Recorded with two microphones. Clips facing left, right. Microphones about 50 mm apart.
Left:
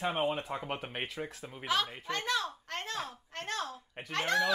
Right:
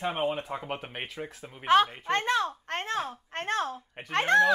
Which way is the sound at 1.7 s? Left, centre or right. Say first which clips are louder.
Right 10 dB; right.